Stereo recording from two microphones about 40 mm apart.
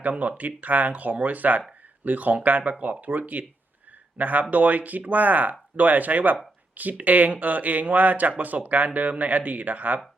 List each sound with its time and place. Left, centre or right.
0.0 s speech: right